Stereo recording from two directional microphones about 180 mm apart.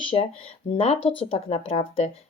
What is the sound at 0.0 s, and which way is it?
Speech, 30° left (ahead or behind).